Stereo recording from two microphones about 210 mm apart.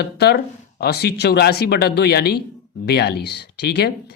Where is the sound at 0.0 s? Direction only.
50° left (ahead or behind).